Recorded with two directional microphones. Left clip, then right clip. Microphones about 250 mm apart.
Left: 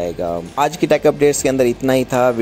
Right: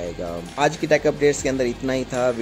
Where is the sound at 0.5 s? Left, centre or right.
Left.